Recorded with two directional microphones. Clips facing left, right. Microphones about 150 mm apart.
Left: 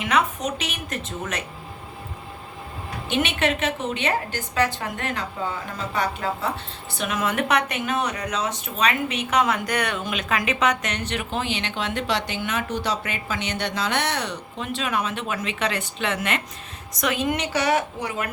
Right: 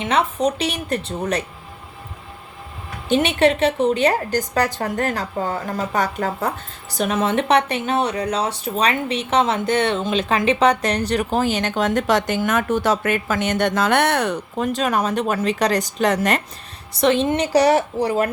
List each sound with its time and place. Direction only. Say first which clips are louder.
0.0 s speech: right 4 dB; 30° right (ahead or behind)
3.1 s speech: right 7 dB; 35° right (ahead or behind)
16.9 s speech: right 7 dB; 30° right (ahead or behind)